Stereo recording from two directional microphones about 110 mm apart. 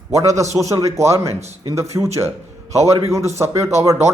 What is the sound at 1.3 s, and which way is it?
Speech, 90° right.